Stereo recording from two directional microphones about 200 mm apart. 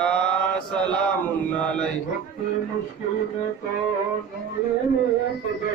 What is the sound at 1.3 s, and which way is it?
Speech, 5° left (ahead or behind).